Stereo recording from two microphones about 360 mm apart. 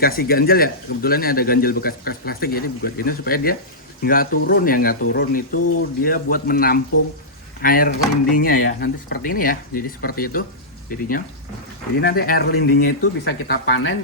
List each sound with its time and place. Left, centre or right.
0.0 s speech: left